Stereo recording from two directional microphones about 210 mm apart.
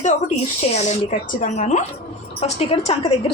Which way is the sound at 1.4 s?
35° left (ahead or behind).